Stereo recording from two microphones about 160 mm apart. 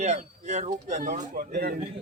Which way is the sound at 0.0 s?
45° right (ahead or behind).